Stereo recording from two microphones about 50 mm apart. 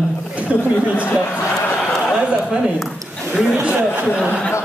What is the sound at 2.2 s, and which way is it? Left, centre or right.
A woman's voice, right.